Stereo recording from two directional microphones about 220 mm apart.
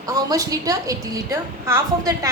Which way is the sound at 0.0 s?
15° right (ahead or behind).